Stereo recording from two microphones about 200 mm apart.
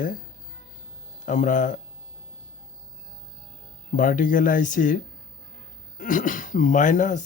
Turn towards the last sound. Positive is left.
turn(degrees=40)  # may be behind; listen again after turning